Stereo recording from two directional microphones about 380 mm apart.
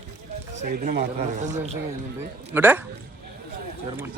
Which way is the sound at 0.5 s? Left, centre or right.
Right.